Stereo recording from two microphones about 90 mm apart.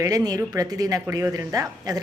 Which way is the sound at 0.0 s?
40° right (ahead or behind).